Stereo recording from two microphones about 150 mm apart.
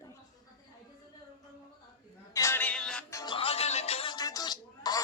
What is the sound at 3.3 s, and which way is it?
Music, 40° left (ahead or behind).